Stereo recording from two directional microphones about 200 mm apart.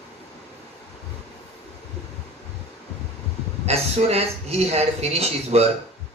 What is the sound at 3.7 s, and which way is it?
Speech, 30° right (ahead or behind).